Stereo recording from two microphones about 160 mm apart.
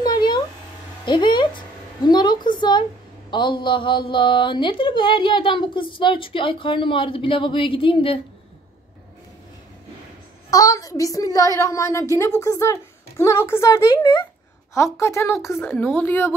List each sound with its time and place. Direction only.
0.0 s a sound: 25° left (ahead or behind)
3.3 s a woman's voice: 30° left (ahead or behind)
10.5 s speech: 20° left (ahead or behind)